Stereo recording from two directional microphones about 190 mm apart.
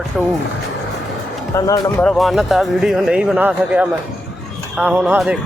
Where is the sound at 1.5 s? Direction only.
15° left (ahead or behind).